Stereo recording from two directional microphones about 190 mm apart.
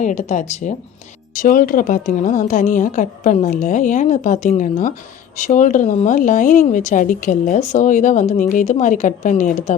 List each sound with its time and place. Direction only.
0.0 s a woman's voice: 40° left (ahead or behind)